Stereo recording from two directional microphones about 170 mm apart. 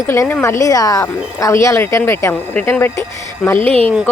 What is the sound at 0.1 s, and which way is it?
Speech, 10° left (ahead or behind).